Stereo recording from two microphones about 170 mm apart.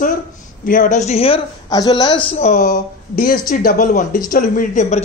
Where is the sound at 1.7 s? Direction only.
20° left (ahead or behind).